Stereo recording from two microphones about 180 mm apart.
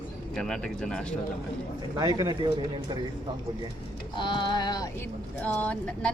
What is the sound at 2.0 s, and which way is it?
Speech, 20° right (ahead or behind).